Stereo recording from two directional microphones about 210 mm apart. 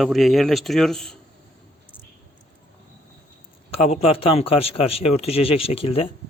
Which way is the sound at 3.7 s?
25° left (ahead or behind).